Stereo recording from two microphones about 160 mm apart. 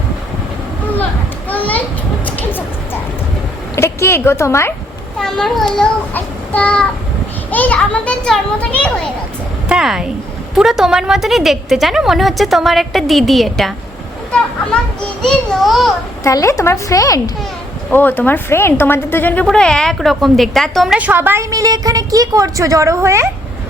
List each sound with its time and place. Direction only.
1.5 s children playing: 10° left (ahead or behind)
2.2 s music: 10° left (ahead or behind)
3.8 s a woman's voice: 15° left (ahead or behind)
5.2 s a woman's voice: 5° left (ahead or behind)
9.6 s a woman's voice: 5° right (ahead or behind)
15.2 s a woman's voice: centre (ahead or behind)
16.2 s a woman's voice: 20° left (ahead or behind)
17.9 s a woman's voice: 10° left (ahead or behind); by 23.3 s 15° right (ahead or behind)